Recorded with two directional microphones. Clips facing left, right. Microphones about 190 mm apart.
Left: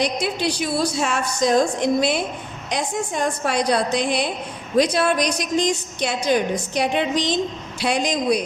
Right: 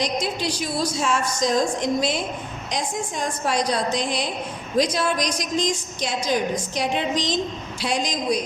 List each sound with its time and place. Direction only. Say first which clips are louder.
0.0 s a woman's voice: left 3 dB; 60° left (ahead or behind)